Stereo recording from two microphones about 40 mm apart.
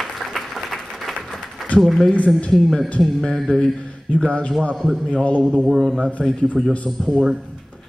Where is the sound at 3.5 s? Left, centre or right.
Left.